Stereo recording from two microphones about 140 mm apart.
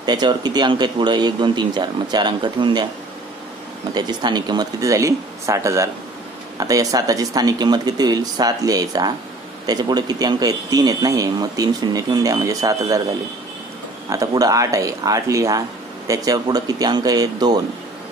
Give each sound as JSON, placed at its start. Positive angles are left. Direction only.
{"t": 0.0, "sound": "speech", "side_deg": -30}
{"t": 3.9, "sound": "a man's voice", "side_deg": -30}
{"t": 14.0, "sound": "a man's voice", "side_deg": -25}